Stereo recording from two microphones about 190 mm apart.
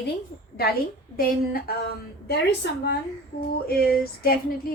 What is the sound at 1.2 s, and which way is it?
A woman's voice, 55° left (ahead or behind).